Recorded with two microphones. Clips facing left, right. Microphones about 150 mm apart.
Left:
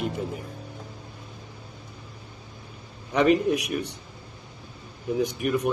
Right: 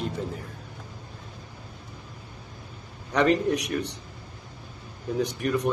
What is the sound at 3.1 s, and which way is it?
Speech, 15° left (ahead or behind).